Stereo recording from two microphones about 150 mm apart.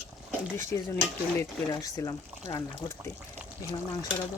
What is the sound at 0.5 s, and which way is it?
Speech, 20° left (ahead or behind).